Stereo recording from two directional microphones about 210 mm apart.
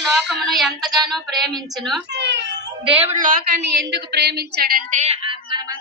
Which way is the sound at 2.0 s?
55° right (ahead or behind).